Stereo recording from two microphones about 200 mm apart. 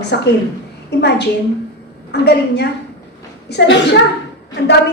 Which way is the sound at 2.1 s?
55° left (ahead or behind).